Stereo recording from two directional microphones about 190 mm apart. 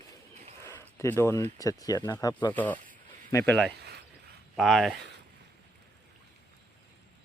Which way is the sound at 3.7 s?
60° right (ahead or behind).